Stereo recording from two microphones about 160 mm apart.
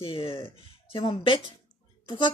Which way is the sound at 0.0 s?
35° left (ahead or behind).